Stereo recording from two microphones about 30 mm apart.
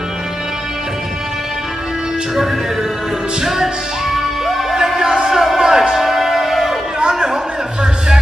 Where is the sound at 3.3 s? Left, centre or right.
Centre.